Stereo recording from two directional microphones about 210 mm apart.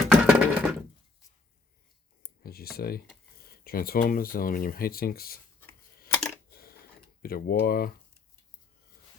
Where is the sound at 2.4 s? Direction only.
45° left (ahead or behind).